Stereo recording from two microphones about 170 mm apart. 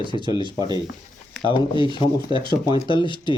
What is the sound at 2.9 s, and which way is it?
Speech, 25° left (ahead or behind).